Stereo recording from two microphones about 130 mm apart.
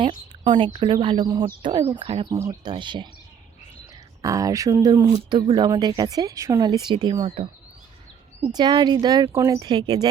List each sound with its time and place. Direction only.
0.4 s a woman's voice: 40° right (ahead or behind)
2.3 s speech: 20° right (ahead or behind)
2.6 s speech: 35° right (ahead or behind)
4.2 s speech: 25° right (ahead or behind); by 7.5 s 45° right (ahead or behind)
8.5 s speech: 30° right (ahead or behind)